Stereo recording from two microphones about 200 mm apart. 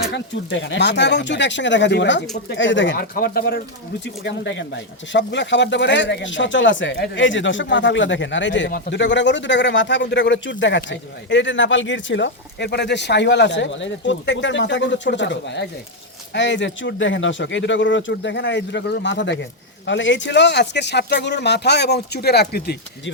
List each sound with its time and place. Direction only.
0.1 s speech: 65° left (ahead or behind)
3.2 s speech: 50° left (ahead or behind)
4.0 s speech: 60° left (ahead or behind)